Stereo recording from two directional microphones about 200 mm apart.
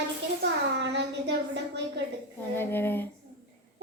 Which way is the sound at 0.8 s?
60° right (ahead or behind).